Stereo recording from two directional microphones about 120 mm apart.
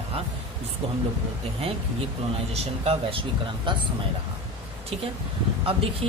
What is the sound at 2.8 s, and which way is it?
Speech, 50° right (ahead or behind).